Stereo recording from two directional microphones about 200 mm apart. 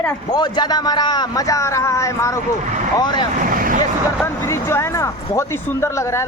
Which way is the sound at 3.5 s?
45° right (ahead or behind).